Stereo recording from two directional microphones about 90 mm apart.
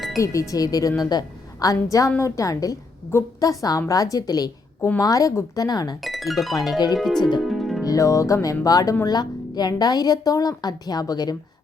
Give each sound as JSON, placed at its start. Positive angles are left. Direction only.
{"t": 0.2, "sound": "a woman's voice", "side_deg": 40}
{"t": 5.5, "sound": "a woman's voice", "side_deg": 45}
{"t": 6.0, "sound": "speech", "side_deg": 0}
{"t": 6.7, "sound": "a woman's voice", "side_deg": 45}
{"t": 7.4, "sound": "music", "side_deg": 0}
{"t": 7.9, "sound": "a woman's voice", "side_deg": 35}